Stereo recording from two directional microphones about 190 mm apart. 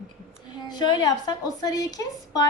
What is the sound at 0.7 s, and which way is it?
A woman's voice, 20° left (ahead or behind).